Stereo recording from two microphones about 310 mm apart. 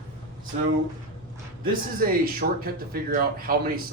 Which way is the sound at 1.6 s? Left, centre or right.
Right.